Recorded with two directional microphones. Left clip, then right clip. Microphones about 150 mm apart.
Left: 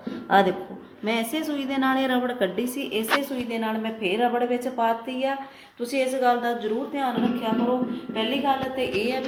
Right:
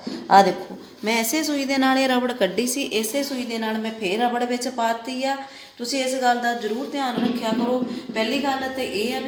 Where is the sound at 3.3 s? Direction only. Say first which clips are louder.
Right 1 dB; 5° right (ahead or behind).